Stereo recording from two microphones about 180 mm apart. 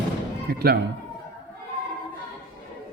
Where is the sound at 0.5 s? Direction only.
60° right (ahead or behind).